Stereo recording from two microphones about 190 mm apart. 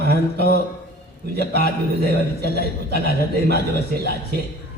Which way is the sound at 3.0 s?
55° left (ahead or behind).